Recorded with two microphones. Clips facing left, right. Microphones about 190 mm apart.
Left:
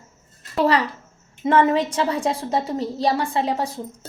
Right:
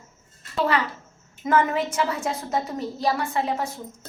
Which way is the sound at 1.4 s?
30° left (ahead or behind).